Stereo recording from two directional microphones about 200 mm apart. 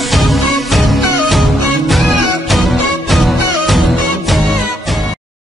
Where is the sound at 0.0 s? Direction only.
Centre (ahead or behind).